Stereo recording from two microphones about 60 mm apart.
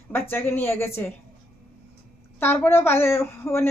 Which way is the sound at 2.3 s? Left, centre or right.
Left.